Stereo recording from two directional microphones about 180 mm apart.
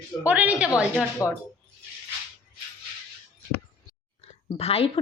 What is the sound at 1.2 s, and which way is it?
Speech, 15° left (ahead or behind).